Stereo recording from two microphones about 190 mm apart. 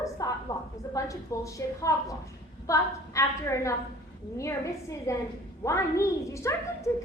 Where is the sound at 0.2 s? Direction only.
20° left (ahead or behind).